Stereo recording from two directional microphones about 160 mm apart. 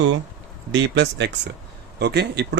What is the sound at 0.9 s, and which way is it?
A man's voice, 90° right.